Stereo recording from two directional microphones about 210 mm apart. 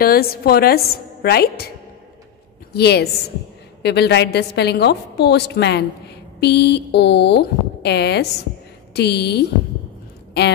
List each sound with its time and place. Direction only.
0.0 s a woman's voice: 45° left (ahead or behind)
2.7 s a woman's voice: 50° left (ahead or behind)